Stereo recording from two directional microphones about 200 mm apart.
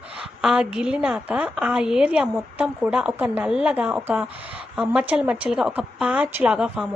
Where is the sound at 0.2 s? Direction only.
5° right (ahead or behind).